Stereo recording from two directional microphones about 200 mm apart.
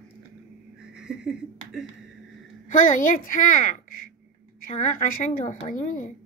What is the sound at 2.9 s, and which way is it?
A child's voice, 40° left (ahead or behind).